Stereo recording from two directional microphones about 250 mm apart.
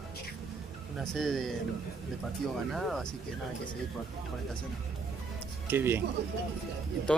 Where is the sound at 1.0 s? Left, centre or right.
Centre.